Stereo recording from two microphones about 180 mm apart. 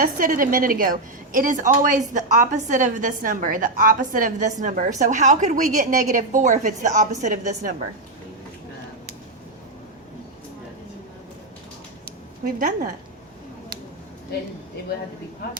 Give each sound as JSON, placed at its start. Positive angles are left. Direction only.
{"t": 0.0, "sound": "a woman's voice", "side_deg": -50}
{"t": 12.5, "sound": "a woman's voice", "side_deg": -50}